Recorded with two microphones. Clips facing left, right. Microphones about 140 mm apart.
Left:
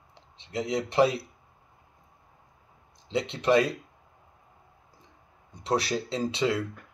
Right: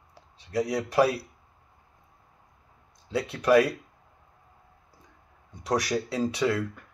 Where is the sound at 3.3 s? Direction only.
25° left (ahead or behind).